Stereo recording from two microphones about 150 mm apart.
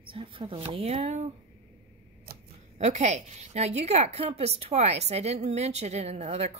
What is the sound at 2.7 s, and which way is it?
Speech, 50° right (ahead or behind).